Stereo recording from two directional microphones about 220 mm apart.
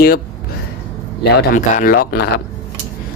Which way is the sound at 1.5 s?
40° left (ahead or behind).